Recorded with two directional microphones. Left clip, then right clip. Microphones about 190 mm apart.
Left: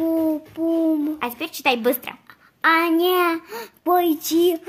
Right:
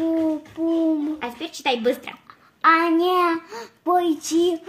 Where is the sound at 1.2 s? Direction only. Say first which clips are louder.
Left 3 dB; 65° left (ahead or behind).